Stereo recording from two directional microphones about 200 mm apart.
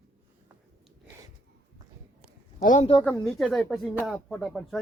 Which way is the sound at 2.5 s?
35° left (ahead or behind).